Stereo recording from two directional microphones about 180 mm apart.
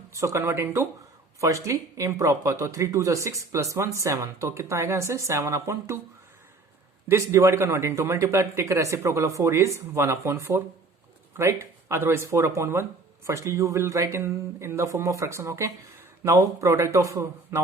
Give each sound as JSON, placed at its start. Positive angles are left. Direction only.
{"t": 0.1, "sound": "speech", "side_deg": -15}
{"t": 7.1, "sound": "speech", "side_deg": -15}